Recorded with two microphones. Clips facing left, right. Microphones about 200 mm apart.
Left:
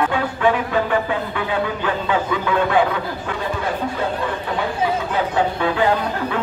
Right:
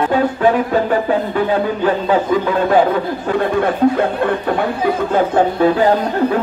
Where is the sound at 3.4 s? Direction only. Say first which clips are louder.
Right 10 dB; 60° right (ahead or behind).